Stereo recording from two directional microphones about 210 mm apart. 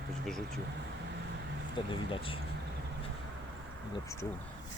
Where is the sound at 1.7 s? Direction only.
25° left (ahead or behind).